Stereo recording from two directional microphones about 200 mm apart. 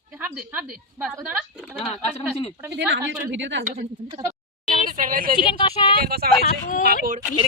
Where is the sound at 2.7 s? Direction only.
60° right (ahead or behind).